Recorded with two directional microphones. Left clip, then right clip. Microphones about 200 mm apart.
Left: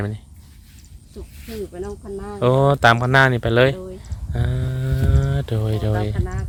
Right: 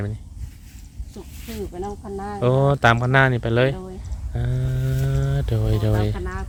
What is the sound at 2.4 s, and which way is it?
Speech, 15° left (ahead or behind).